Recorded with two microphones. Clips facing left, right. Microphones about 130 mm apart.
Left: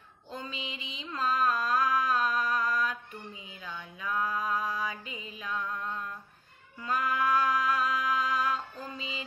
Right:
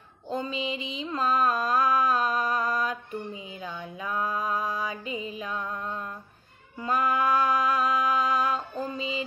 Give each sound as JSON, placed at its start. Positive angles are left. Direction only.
{"t": 0.3, "sound": "mantra", "side_deg": -20}
{"t": 3.5, "sound": "a sound", "side_deg": -25}
{"t": 4.8, "sound": "music", "side_deg": -20}